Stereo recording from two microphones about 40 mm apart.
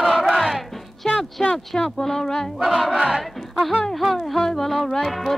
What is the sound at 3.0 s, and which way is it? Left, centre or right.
Battle cry, centre.